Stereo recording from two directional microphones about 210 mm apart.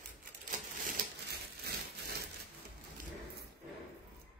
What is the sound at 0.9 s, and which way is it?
Crumpling, 50° right (ahead or behind).